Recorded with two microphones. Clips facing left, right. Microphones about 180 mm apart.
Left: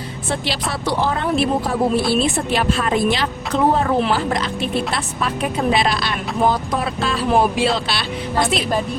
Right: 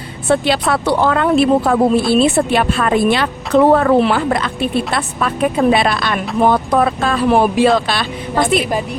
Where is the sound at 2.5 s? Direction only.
60° right (ahead or behind).